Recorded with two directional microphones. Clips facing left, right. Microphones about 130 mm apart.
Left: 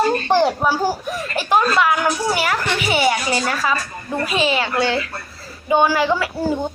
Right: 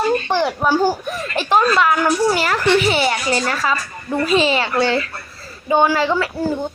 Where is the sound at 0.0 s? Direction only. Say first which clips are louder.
Left 2 dB; 35° left (ahead or behind).